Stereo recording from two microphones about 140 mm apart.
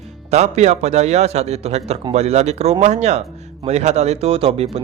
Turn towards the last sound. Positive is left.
turn(degrees=-45)  # may be behind; listen again after turning